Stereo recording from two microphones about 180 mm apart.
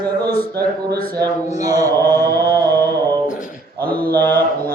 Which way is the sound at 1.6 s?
20° right (ahead or behind).